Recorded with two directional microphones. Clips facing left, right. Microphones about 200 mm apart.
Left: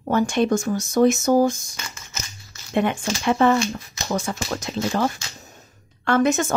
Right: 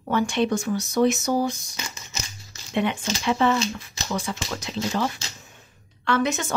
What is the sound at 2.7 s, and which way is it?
Speech, 45° left (ahead or behind).